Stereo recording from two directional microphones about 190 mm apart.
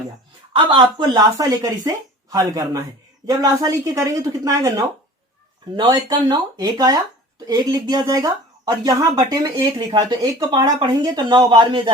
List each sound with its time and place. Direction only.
0.5 s speech: 25° right (ahead or behind)